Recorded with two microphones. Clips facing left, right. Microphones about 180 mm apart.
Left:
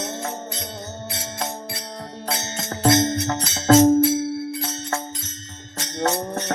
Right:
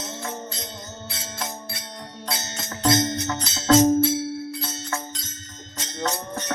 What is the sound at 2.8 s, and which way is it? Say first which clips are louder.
Music: left 3 dB; 25° left (ahead or behind).